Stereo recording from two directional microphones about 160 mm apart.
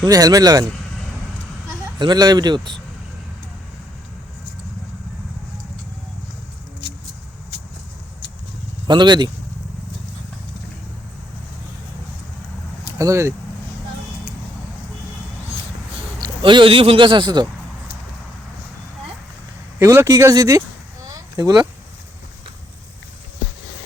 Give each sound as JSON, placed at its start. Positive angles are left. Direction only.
{"t": 0.0, "sound": "speech", "side_deg": -25}
{"t": 1.6, "sound": "speech", "side_deg": -25}
{"t": 6.8, "sound": "vehicle", "side_deg": 90}
{"t": 8.9, "sound": "speech", "side_deg": -30}
{"t": 13.0, "sound": "speech", "side_deg": -20}
{"t": 16.2, "sound": "a man's voice", "side_deg": -30}
{"t": 19.8, "sound": "speech", "side_deg": -20}